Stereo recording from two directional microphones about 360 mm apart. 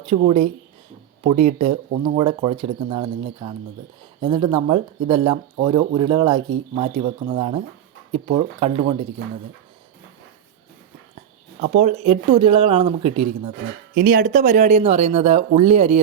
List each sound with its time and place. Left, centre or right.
0.0 s speech: centre
1.5 s speech: centre
11.6 s speech: centre